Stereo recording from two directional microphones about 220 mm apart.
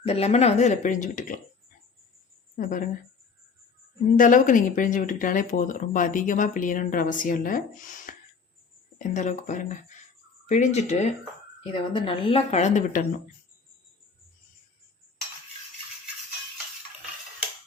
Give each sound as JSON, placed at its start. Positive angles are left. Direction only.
{"t": 0.0, "sound": "speech", "side_deg": 30}
{"t": 2.6, "sound": "speech", "side_deg": 35}
{"t": 4.2, "sound": "speech", "side_deg": 35}